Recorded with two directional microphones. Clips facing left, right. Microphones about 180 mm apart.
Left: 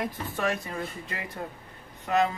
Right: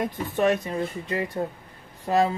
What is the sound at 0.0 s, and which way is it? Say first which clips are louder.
Speech: right 6 dB; 25° right (ahead or behind).